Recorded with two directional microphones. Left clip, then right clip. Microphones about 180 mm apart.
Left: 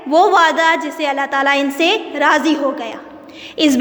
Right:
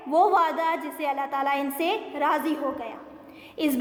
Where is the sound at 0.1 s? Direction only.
25° left (ahead or behind).